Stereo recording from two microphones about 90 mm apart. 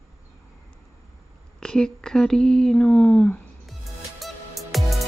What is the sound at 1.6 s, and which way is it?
Speech, 5° left (ahead or behind).